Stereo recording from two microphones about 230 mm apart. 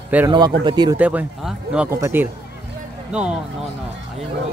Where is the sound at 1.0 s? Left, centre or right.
Centre.